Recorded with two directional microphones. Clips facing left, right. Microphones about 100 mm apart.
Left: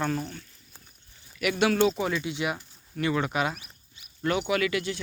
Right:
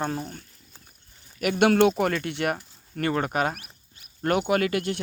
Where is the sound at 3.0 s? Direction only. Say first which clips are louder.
Right 2 dB; 50° right (ahead or behind).